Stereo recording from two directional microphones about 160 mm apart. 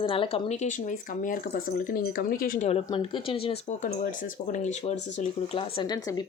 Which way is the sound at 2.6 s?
35° left (ahead or behind).